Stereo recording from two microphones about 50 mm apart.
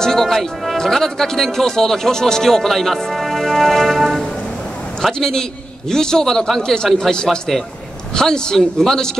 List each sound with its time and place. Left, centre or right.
0.0 s speech: centre
7.2 s a man's voice: centre
8.1 s speech: centre